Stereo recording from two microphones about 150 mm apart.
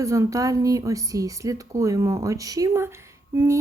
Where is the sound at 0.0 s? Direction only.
20° right (ahead or behind).